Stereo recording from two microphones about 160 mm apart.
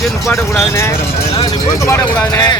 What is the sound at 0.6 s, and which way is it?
Speech, 15° left (ahead or behind).